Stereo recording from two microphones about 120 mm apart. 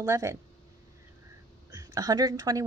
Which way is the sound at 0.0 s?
25° right (ahead or behind).